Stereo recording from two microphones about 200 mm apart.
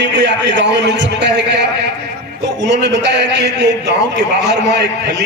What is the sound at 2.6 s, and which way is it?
A man's voice, 60° right (ahead or behind).